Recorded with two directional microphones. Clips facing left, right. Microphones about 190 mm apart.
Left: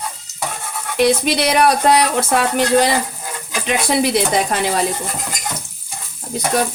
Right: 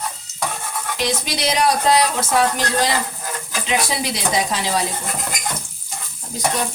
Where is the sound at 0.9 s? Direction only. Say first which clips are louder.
Left 10 dB; 60° left (ahead or behind).